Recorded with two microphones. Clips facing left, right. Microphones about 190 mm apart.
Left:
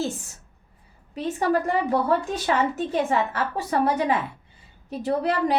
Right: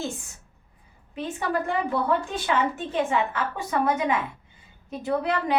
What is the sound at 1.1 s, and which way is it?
A woman's voice, 40° left (ahead or behind).